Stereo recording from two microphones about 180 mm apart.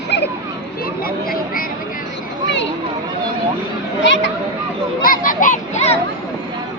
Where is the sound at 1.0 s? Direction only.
55° left (ahead or behind).